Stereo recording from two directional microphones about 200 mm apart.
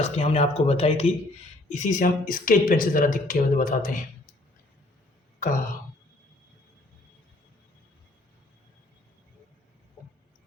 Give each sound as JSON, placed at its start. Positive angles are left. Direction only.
{"t": 0.0, "sound": "speech", "side_deg": 30}